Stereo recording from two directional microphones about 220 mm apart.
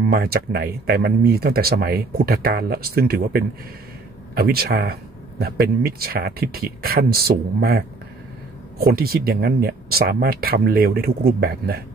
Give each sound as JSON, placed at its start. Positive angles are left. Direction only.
{"t": 0.1, "sound": "speech", "side_deg": -45}